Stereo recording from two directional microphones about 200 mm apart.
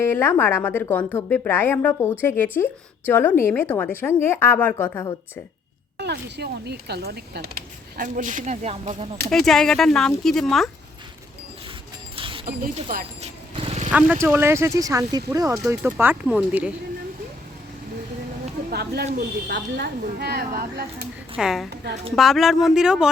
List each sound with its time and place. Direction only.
0.0 s a woman's voice: 10° left (ahead or behind)
6.0 s speech: 55° right (ahead or behind); by 9.0 s 35° right (ahead or behind)
9.3 s speech: centre (ahead or behind)
12.1 s mechanisms: 25° right (ahead or behind)
12.5 s speech: 45° right (ahead or behind)
13.6 s vehicle: 30° right (ahead or behind)
14.1 s speech: 10° right (ahead or behind)
18.7 s speech: 50° right (ahead or behind)
21.3 s speech: centre (ahead or behind)
21.7 s a woman's voice: 55° right (ahead or behind)
22.1 s speech: centre (ahead or behind)